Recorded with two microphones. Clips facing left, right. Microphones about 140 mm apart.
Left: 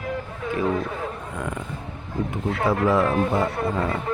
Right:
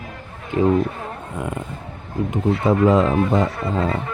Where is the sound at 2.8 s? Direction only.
20° right (ahead or behind).